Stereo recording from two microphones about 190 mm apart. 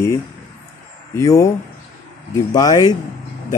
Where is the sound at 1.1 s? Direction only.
15° left (ahead or behind).